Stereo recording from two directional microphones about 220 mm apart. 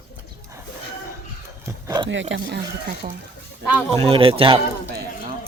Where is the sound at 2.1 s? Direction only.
55° right (ahead or behind).